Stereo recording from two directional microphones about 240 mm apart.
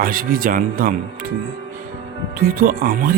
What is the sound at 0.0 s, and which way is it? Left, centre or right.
Speech, right.